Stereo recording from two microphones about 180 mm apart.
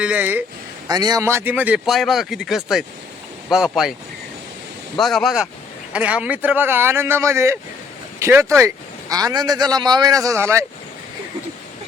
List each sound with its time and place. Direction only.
0.0 s speech: 10° right (ahead or behind)
0.9 s speech: 20° right (ahead or behind); by 3.9 s 5° right (ahead or behind)
4.9 s speech: centre (ahead or behind); by 10.7 s 15° right (ahead or behind)